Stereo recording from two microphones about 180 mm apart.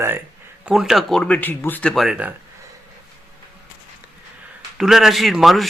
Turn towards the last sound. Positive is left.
turn(degrees=0)  # may be behind; listen again after turning